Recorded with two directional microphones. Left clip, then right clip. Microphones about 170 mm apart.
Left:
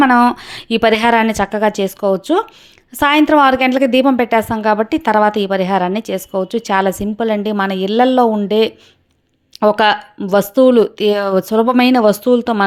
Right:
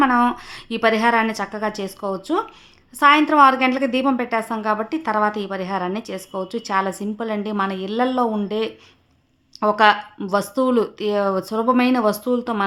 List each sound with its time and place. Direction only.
0.0 s a woman's voice: 40° left (ahead or behind)